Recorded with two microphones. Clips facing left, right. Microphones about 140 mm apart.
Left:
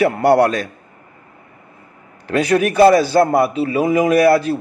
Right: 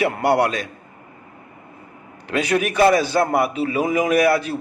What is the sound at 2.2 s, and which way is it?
A man's voice, 40° left (ahead or behind).